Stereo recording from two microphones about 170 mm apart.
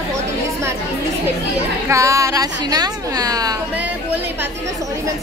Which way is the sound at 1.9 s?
20° right (ahead or behind).